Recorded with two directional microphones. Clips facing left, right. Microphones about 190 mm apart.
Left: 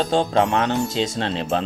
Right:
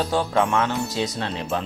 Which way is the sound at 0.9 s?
25° left (ahead or behind).